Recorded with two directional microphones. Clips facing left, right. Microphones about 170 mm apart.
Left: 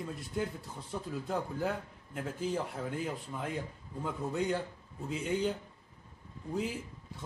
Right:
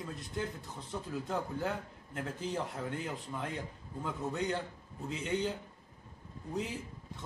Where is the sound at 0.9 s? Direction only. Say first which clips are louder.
Left 1 dB; 5° left (ahead or behind).